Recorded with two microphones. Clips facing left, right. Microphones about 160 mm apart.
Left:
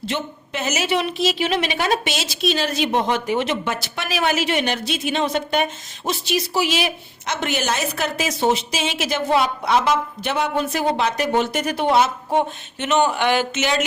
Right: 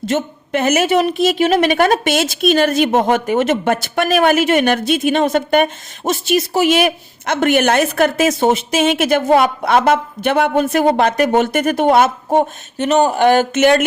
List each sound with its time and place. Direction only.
0.0 s a woman's voice: 50° right (ahead or behind)